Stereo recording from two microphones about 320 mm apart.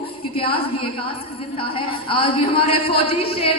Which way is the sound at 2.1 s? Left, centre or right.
Centre.